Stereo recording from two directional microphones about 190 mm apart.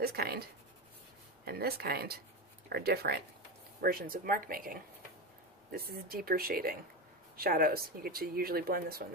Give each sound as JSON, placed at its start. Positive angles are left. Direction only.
{"t": 0.0, "sound": "speech", "side_deg": -55}